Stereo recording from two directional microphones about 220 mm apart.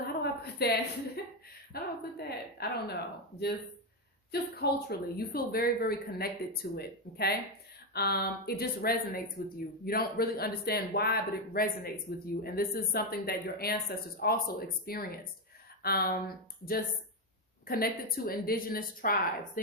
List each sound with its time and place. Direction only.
0.0 s a sound: 45° left (ahead or behind)
1.7 s speech: 45° left (ahead or behind)
4.3 s a woman's voice: 45° left (ahead or behind)